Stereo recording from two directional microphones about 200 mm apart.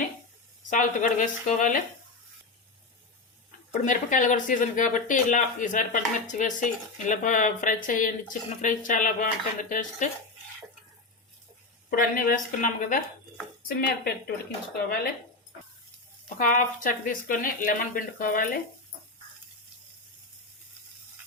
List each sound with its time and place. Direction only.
0.7 s speech: 40° left (ahead or behind)
3.7 s speech: 40° left (ahead or behind)
11.9 s speech: 45° left (ahead or behind)
16.4 s speech: 45° left (ahead or behind)